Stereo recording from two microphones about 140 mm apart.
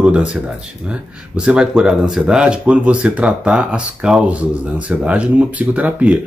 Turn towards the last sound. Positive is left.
turn(degrees=-10)  # may be behind; listen again after turning